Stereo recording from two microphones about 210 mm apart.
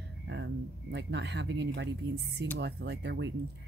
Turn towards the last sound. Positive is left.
turn(degrees=-55)  # may be behind; listen again after turning